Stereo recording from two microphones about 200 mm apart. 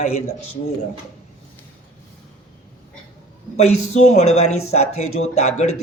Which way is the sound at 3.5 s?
35° left (ahead or behind).